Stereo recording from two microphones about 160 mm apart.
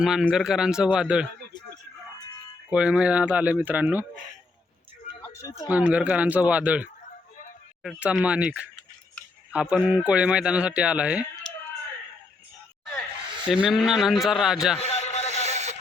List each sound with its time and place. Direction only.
0.0 s a man's voice: 5° right (ahead or behind)
2.6 s speech: 5° right (ahead or behind)
5.2 s music: 20° left (ahead or behind)
5.7 s speech: 10° right (ahead or behind)
13.4 s a man's voice: 5° right (ahead or behind)
14.8 s a sound: 40° left (ahead or behind)
15.3 s music: 45° right (ahead or behind)